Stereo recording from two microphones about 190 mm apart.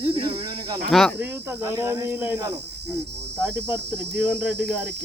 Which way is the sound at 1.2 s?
15° right (ahead or behind).